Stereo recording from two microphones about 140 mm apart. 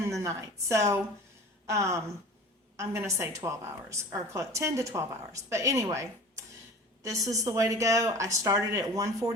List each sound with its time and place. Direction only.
0.2 s a woman's voice: 20° right (ahead or behind)